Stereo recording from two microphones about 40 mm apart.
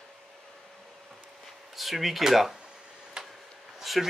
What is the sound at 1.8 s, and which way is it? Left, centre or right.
Speech, centre.